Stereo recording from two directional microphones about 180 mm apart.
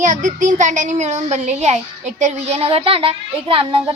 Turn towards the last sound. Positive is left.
turn(degrees=-30)  # may be behind; listen again after turning